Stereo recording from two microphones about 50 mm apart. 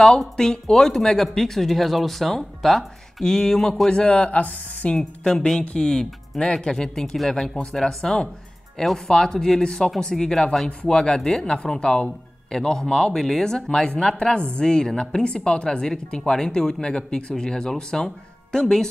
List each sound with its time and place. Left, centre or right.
0.4 s speech: centre
3.9 s speech: left
4.9 s speech: centre